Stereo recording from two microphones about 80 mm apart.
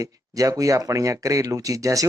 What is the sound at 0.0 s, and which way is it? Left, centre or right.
Speech, right.